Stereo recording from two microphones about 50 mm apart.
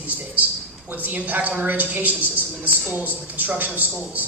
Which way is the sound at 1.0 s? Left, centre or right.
Right.